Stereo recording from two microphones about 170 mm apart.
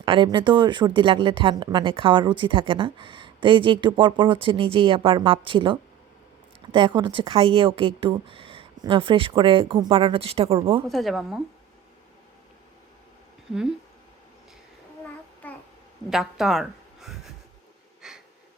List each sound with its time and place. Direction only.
0.0 s a woman's voice: 30° right (ahead or behind)
10.8 s a woman's voice: centre (ahead or behind)
13.5 s a woman's voice: 5° right (ahead or behind)
15.4 s babbling: 10° left (ahead or behind)
16.0 s speech: centre (ahead or behind)
18.0 s wheeze: 5° right (ahead or behind)